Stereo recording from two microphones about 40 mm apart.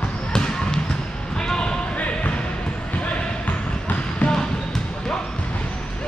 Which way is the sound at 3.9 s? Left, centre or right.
Left.